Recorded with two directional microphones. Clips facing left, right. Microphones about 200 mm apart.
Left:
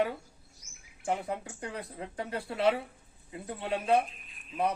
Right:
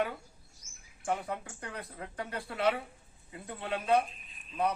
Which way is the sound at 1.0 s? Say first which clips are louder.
Left 2 dB; 25° left (ahead or behind).